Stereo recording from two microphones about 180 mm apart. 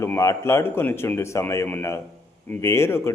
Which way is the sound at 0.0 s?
15° left (ahead or behind).